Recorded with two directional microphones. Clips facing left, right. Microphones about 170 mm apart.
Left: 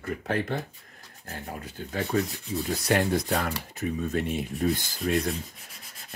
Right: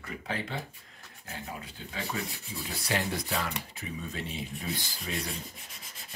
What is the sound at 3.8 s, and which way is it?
Rub, 50° left (ahead or behind).